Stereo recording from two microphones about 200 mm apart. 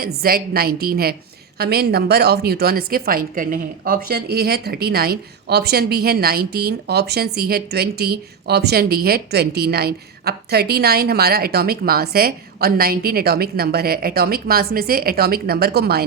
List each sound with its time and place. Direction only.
0.0 s a woman's voice: 50° right (ahead or behind)